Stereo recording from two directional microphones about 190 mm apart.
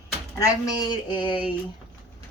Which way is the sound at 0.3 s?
20° left (ahead or behind).